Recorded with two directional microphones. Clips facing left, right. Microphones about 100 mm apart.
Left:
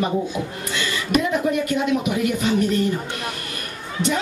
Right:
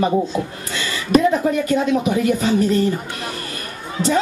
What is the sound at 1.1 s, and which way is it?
Speech, 35° right (ahead or behind).